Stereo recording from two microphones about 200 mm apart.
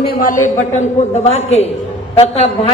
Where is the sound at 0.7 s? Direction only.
30° left (ahead or behind).